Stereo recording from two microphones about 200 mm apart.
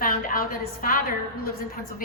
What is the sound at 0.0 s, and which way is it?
A woman's voice, 45° left (ahead or behind).